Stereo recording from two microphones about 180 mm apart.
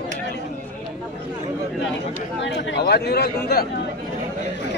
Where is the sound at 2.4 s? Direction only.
75° left (ahead or behind).